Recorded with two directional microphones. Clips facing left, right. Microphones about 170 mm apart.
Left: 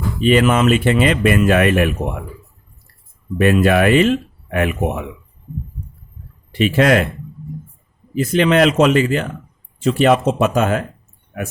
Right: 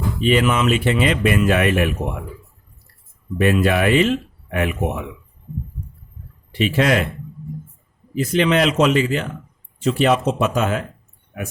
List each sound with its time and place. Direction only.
0.2 s speech: 50° left (ahead or behind)
3.3 s speech: 55° left (ahead or behind)
6.5 s speech: 55° left (ahead or behind)
8.1 s speech: 50° left (ahead or behind)